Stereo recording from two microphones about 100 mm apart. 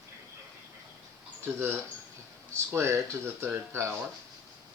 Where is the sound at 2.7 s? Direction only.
30° right (ahead or behind).